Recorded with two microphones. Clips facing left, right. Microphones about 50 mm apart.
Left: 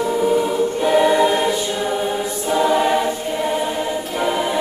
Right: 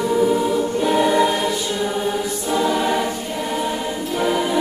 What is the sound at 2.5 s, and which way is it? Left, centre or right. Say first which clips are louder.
Choir: left 3 dB; centre.